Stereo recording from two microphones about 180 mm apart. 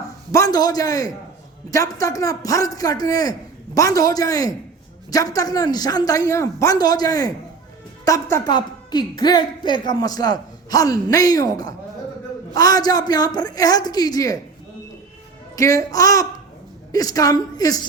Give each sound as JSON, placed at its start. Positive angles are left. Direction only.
{"t": 0.3, "sound": "a woman's voice", "side_deg": 20}
{"t": 15.5, "sound": "a woman's voice", "side_deg": 20}